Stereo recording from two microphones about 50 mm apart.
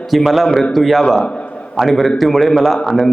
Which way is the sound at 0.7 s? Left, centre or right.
Centre.